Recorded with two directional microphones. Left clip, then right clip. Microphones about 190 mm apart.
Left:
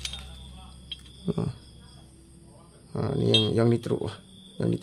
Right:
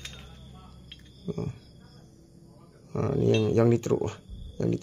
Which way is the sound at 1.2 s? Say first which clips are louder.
Left 3 dB; 25° left (ahead or behind).